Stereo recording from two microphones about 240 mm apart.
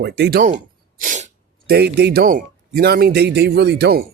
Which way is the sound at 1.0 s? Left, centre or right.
Right.